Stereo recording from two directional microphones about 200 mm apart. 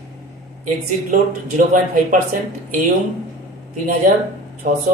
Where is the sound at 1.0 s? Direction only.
40° right (ahead or behind).